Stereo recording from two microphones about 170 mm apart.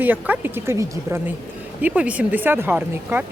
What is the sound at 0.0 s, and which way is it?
A woman's voice, 10° right (ahead or behind).